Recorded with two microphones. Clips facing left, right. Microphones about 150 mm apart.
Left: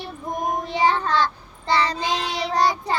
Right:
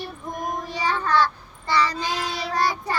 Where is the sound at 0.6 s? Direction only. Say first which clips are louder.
Left 6 dB; 25° left (ahead or behind).